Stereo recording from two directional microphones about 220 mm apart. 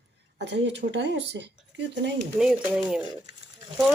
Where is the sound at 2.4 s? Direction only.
5° right (ahead or behind).